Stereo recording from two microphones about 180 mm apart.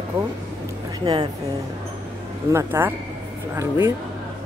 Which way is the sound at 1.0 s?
20° right (ahead or behind).